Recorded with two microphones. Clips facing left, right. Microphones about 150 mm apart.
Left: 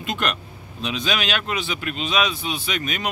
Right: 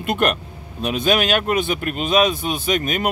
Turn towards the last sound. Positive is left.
turn(degrees=-45)  # may be behind; listen again after turning